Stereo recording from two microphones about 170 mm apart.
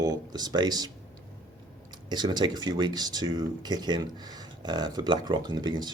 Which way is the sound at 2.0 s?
25° right (ahead or behind).